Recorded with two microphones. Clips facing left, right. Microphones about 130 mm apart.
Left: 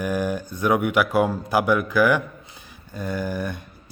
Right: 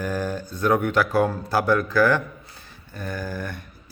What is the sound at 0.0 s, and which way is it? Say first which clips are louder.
A man's voice: left 2 dB; 15° left (ahead or behind).